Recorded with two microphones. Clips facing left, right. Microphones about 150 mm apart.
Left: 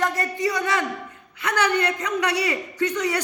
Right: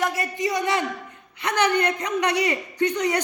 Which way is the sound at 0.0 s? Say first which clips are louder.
Left 1 dB; 10° right (ahead or behind).